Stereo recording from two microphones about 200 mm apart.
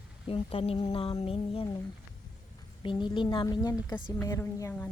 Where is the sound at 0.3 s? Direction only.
30° left (ahead or behind).